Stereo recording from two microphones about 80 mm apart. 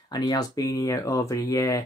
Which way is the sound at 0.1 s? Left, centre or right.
Left.